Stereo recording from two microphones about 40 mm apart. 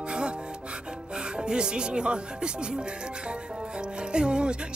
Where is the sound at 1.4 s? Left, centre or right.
Right.